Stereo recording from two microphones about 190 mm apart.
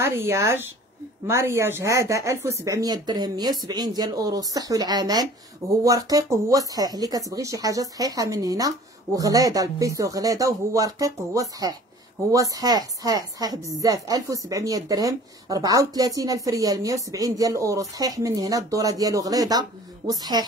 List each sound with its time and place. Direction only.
0.0 s a woman's voice: 15° right (ahead or behind)